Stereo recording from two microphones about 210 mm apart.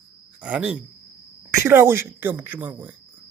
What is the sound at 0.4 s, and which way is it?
Speech, 5° right (ahead or behind).